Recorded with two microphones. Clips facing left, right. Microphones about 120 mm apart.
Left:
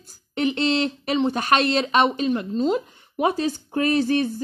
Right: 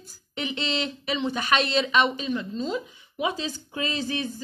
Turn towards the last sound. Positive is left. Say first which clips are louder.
# left 9 dB
turn(degrees=55)  # may be behind; listen again after turning